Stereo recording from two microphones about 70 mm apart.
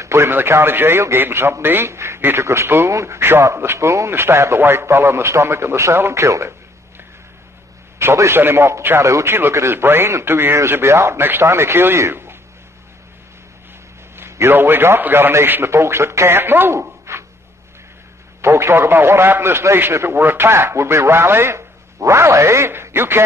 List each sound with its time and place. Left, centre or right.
0.0 s a man's voice: right
8.0 s a man's voice: right
14.1 s a man's voice: right
18.4 s a man's voice: right